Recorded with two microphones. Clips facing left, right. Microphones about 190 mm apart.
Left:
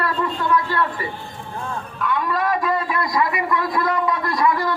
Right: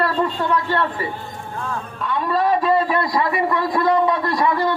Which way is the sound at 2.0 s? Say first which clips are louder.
Right 2 dB; 30° right (ahead or behind).